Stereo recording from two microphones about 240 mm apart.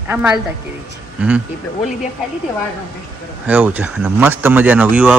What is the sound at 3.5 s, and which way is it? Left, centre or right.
Speech, centre.